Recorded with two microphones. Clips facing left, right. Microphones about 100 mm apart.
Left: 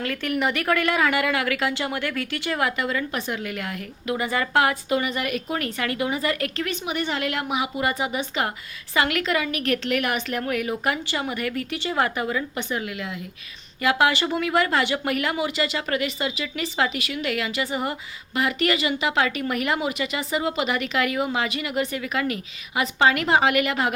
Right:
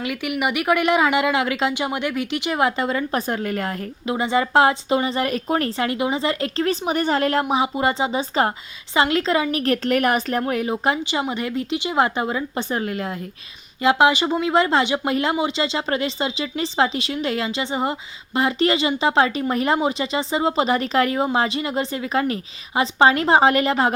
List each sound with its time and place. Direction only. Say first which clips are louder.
0.0 s speech: right 1 dB; 15° right (ahead or behind); by 3.8 s 40° right (ahead or behind)
4.0 s speech: right 4 dB; 25° right (ahead or behind)
13.8 s speech: right 4 dB; 20° right (ahead or behind)